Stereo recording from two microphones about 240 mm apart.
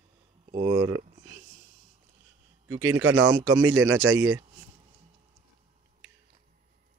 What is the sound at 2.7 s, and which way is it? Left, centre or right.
Speech, right.